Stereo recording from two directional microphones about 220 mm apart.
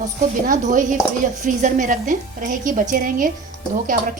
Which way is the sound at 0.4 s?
35° right (ahead or behind).